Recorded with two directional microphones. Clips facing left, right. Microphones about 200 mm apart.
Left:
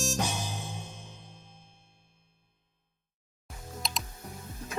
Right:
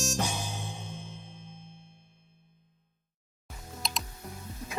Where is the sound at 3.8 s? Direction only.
Centre (ahead or behind).